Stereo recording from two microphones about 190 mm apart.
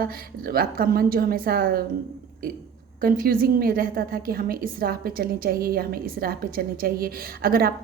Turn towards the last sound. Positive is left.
turn(degrees=-50)  # may be behind; listen again after turning